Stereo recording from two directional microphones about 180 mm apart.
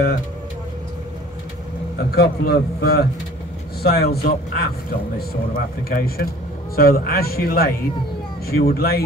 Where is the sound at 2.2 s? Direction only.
60° left (ahead or behind).